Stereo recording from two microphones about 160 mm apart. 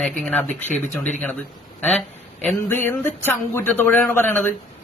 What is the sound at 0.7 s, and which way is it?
Speech, 50° left (ahead or behind).